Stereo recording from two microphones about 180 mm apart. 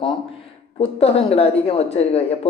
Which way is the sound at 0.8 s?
35° left (ahead or behind).